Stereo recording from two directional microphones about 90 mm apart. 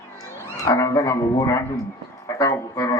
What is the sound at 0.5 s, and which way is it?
A man's voice, 35° left (ahead or behind).